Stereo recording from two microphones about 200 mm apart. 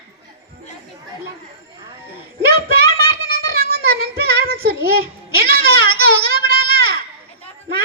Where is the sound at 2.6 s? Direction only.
50° right (ahead or behind).